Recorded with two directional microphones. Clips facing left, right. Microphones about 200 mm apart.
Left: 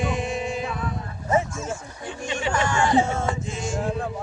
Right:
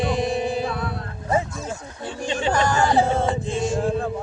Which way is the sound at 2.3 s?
35° right (ahead or behind).